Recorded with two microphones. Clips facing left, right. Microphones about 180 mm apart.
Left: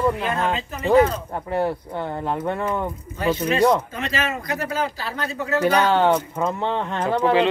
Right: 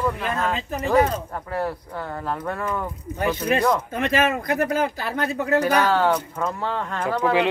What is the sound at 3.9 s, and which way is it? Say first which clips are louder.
Speech: right 5 dB; 55° right (ahead or behind).